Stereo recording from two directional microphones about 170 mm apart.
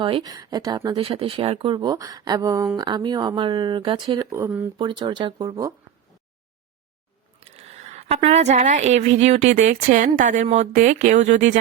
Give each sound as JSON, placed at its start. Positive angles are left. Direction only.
{"t": 0.0, "sound": "speech", "side_deg": -25}
{"t": 4.3, "sound": "speech", "side_deg": -15}
{"t": 4.8, "sound": "speech", "side_deg": -25}
{"t": 7.3, "sound": "a woman's voice", "side_deg": -40}